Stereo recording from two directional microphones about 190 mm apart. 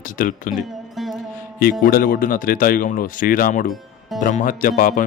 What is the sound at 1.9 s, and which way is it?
Speech, 50° left (ahead or behind).